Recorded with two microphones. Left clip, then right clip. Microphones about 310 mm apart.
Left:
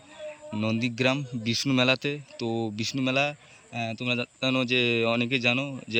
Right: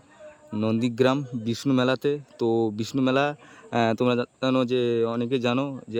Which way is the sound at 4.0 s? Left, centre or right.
Centre.